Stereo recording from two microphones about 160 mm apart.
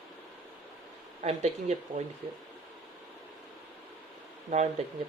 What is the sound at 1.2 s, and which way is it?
Speech, 45° right (ahead or behind).